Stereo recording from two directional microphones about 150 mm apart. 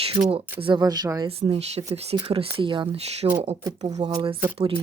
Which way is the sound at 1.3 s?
40° right (ahead or behind).